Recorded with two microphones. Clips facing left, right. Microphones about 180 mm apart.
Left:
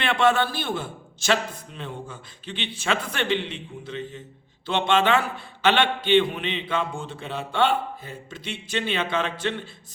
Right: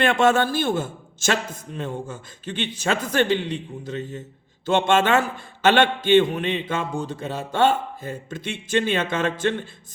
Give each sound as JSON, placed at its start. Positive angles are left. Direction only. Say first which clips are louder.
{"t": 0.0, "sound": "a man's voice", "louder": "right 3 dB", "side_deg": -45}